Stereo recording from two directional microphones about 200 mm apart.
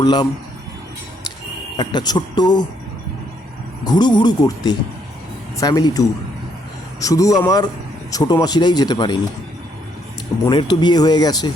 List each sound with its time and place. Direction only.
0.0 s speech: 20° left (ahead or behind)
1.7 s speech: 20° left (ahead or behind)
3.8 s speech: 20° left (ahead or behind)
10.4 s speech: 25° left (ahead or behind)